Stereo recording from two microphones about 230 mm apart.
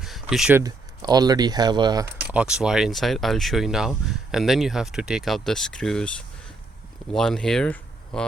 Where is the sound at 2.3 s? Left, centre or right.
Centre.